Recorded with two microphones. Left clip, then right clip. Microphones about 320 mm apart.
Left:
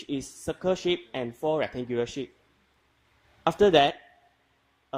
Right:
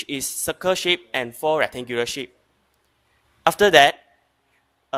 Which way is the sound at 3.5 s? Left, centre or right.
Right.